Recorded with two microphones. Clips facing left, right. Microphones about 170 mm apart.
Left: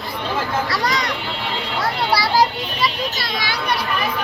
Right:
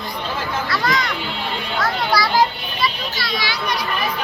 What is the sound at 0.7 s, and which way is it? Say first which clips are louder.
A child's voice: even; 40° left (ahead or behind).